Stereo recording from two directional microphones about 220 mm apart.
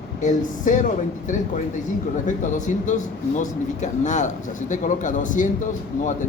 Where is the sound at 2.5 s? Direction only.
35° left (ahead or behind).